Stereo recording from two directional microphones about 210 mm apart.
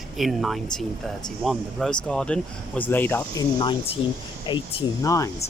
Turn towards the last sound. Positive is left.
turn(degrees=15)  # may be behind; listen again after turning